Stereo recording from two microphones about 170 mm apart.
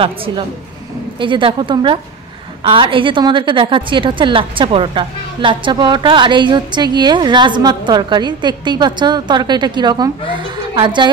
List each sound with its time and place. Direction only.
0.0 s a woman's voice: 30° right (ahead or behind)